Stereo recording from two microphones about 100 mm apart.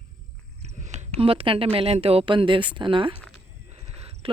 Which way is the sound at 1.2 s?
70° right (ahead or behind).